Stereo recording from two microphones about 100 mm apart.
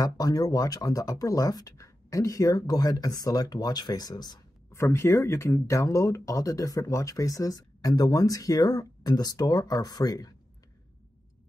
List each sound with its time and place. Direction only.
0.0 s speech: 40° left (ahead or behind)
4.7 s speech: 25° left (ahead or behind)